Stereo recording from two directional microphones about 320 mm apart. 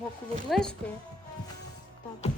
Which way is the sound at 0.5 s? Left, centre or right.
Centre.